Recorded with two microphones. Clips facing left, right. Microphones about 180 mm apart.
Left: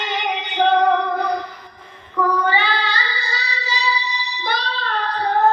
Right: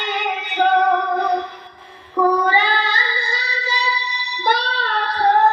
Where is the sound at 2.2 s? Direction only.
35° right (ahead or behind).